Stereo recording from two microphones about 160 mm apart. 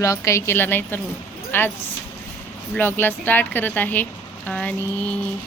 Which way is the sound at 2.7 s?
15° left (ahead or behind).